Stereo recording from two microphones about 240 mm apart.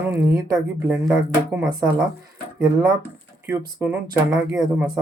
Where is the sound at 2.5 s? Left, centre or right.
Centre.